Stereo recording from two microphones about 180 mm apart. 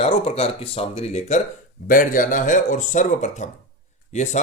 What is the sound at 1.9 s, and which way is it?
Speech, 50° left (ahead or behind).